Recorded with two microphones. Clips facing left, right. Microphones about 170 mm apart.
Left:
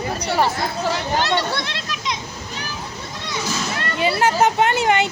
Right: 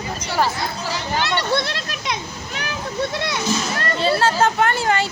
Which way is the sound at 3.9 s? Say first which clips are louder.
Even; 15° left (ahead or behind).